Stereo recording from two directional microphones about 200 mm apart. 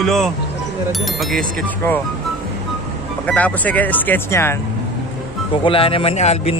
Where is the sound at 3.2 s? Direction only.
5° left (ahead or behind).